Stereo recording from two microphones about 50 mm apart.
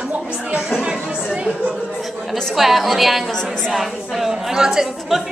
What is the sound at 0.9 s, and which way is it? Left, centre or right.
Speech, centre.